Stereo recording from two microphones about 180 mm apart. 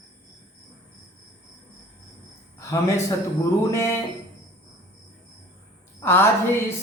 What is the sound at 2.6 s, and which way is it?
A man's voice, 15° left (ahead or behind).